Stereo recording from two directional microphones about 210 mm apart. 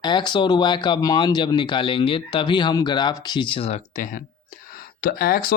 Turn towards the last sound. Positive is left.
turn(degrees=45)  # may be behind; listen again after turning